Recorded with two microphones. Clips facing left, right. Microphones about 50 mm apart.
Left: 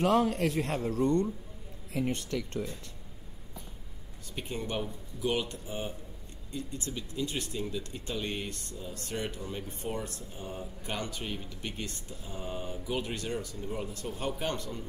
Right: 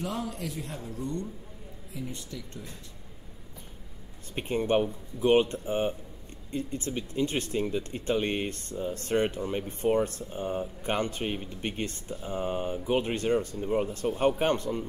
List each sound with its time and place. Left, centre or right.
0.0 s a man's voice: left
4.4 s speech: right